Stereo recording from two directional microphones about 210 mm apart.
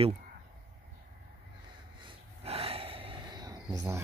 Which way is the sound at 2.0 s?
30° right (ahead or behind).